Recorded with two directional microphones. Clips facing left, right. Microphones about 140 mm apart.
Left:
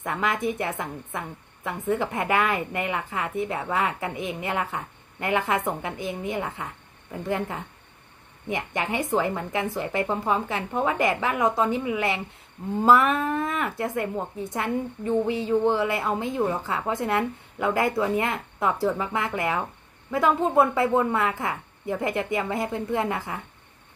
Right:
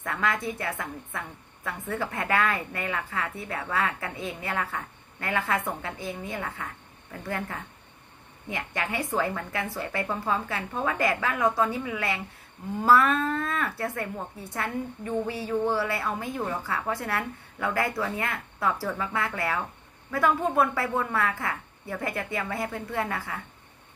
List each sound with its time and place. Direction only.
0.0 s a woman's voice: 15° left (ahead or behind)